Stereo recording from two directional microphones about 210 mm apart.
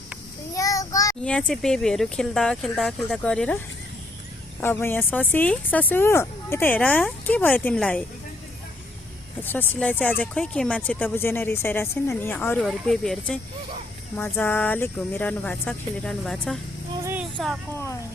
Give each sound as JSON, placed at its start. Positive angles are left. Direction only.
{"t": 0.5, "sound": "child singing", "side_deg": 15}
{"t": 1.2, "sound": "speech", "side_deg": 5}
{"t": 4.6, "sound": "speech", "side_deg": 10}
{"t": 9.4, "sound": "speech", "side_deg": 10}
{"t": 17.0, "sound": "vehicle", "side_deg": -10}